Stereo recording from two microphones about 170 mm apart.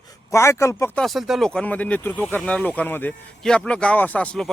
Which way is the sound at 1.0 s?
Centre (ahead or behind).